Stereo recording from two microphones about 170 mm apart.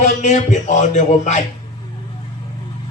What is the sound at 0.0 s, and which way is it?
Speech, 45° left (ahead or behind).